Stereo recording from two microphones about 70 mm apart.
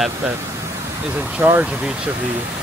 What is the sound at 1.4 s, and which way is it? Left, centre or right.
Speech, right.